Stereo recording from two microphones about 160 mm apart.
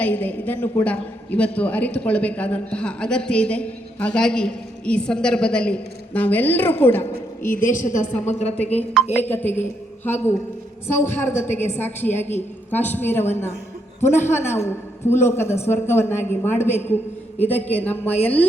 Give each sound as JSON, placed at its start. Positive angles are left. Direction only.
{"t": 0.0, "sound": "a man's voice", "side_deg": 10}
{"t": 7.5, "sound": "a woman's voice", "side_deg": 55}
{"t": 8.7, "sound": "a woman's voice", "side_deg": 0}
{"t": 9.1, "sound": "a man's voice", "side_deg": 10}